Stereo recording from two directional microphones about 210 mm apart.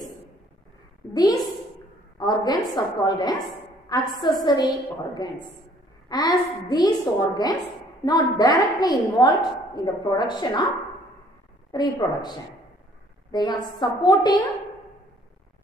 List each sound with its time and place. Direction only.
1.1 s a woman's voice: 15° left (ahead or behind)
11.7 s a woman's voice: 20° left (ahead or behind)